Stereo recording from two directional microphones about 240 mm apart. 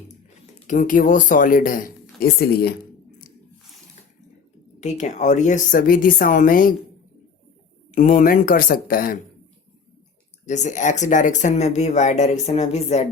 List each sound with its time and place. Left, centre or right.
0.7 s speech: left
4.8 s speech: left
7.9 s speech: left
10.4 s speech: left